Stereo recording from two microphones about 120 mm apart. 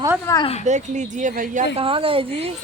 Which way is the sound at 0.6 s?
85° right.